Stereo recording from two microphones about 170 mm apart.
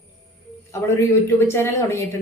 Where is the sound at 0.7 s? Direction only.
15° left (ahead or behind).